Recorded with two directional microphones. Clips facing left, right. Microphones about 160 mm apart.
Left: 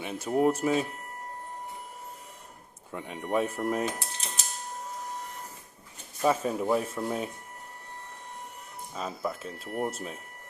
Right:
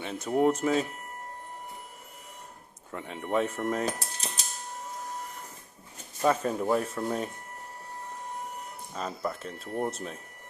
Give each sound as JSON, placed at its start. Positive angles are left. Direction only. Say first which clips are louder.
{"t": 0.0, "sound": "speech", "louder": "even", "side_deg": 10}
{"t": 2.9, "sound": "speech", "louder": "even", "side_deg": 15}
{"t": 3.8, "sound": "mechanisms", "louder": "right 1 dB", "side_deg": -35}
{"t": 6.2, "sound": "speech", "louder": "even", "side_deg": 5}
{"t": 9.0, "sound": "speech", "louder": "even", "side_deg": 5}
{"t": 9.6, "sound": "speech", "louder": "even", "side_deg": -20}
{"t": 9.9, "sound": "speech", "louder": "even", "side_deg": 5}